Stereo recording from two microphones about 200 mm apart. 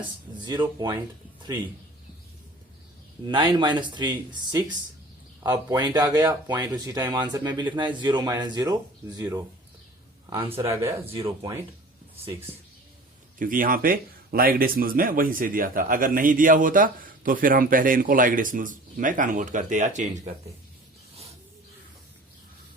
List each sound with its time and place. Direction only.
0.0 s speech: 20° right (ahead or behind)
3.2 s speech: 20° right (ahead or behind)
10.6 s a man's voice: 15° right (ahead or behind)
13.4 s speech: 45° right (ahead or behind)